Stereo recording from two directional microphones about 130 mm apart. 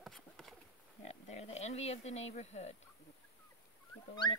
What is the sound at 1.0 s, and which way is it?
Speech, 60° left (ahead or behind).